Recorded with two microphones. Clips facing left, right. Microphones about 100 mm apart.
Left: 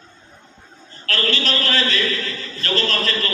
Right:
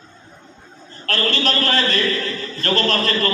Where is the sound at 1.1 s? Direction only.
40° right (ahead or behind).